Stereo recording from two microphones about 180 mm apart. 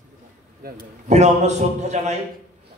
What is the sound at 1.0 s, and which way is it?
A man's voice, 40° right (ahead or behind).